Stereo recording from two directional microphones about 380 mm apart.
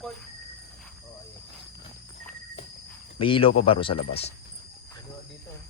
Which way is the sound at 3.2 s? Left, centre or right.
Centre.